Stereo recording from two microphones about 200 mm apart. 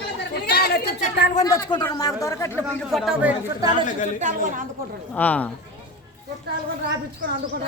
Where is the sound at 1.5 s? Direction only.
20° left (ahead or behind).